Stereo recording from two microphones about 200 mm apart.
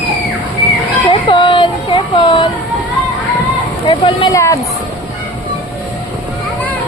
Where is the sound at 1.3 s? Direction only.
25° left (ahead or behind).